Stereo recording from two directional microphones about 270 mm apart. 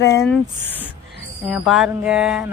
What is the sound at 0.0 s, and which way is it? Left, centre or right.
Speech, centre.